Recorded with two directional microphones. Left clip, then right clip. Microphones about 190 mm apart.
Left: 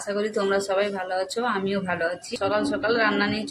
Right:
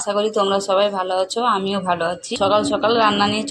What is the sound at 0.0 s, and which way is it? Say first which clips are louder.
Speech: right 7 dB; 15° right (ahead or behind).